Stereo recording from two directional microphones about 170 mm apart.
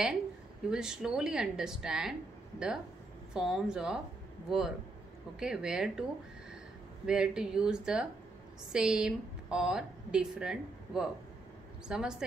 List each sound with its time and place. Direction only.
0.7 s a woman's voice: 5° right (ahead or behind)
3.3 s a woman's voice: 5° right (ahead or behind)
7.1 s a woman's voice: 5° right (ahead or behind)